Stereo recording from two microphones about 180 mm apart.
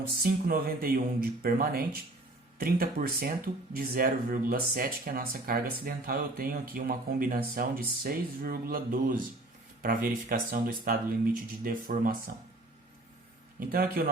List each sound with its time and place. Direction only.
0.2 s speech: 55° right (ahead or behind)
13.6 s speech: 55° right (ahead or behind)